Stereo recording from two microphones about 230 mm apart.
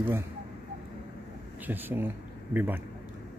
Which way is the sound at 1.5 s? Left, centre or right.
Centre.